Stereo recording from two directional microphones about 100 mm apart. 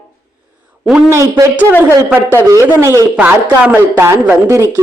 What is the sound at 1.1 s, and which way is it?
Speech, 35° right (ahead or behind).